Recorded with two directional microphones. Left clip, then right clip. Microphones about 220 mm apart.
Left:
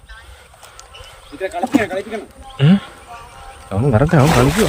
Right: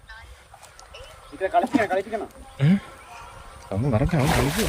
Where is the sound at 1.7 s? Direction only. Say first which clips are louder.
Left 4 dB; 50° left (ahead or behind).